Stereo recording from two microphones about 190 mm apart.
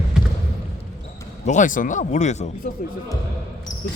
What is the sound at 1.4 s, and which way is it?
Speech, 40° left (ahead or behind).